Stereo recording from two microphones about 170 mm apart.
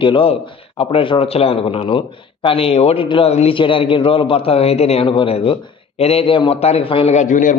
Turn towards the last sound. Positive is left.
turn(degrees=50)  # may be behind; listen again after turning